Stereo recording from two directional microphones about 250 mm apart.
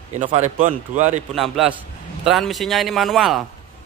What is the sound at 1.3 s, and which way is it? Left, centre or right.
A man's voice, centre.